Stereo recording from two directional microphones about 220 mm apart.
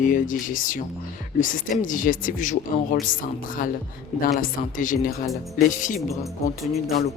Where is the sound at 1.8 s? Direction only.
35° left (ahead or behind).